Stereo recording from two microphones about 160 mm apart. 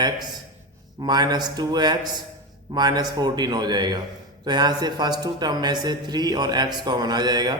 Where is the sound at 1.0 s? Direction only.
25° right (ahead or behind).